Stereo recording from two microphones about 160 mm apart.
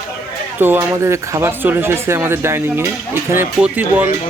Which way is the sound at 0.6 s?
15° right (ahead or behind).